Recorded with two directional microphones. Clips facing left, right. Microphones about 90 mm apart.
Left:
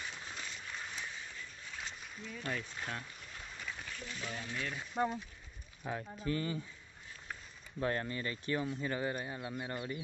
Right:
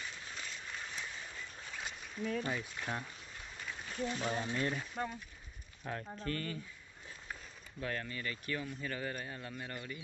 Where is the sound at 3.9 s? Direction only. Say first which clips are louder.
Right 11 dB; 40° right (ahead or behind).